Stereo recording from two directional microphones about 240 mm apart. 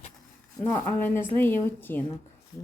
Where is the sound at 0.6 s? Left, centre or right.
Centre.